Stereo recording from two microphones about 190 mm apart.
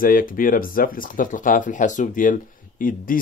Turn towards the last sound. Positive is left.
turn(degrees=45)  # may be behind; listen again after turning